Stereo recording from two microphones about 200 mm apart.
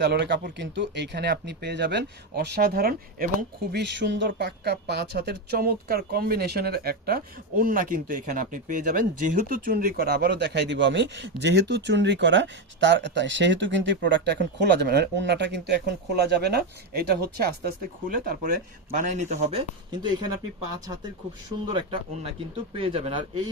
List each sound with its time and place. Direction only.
0.0 s speech: 60° right (ahead or behind); by 20.1 s 20° right (ahead or behind)
21.7 s speech: 25° right (ahead or behind)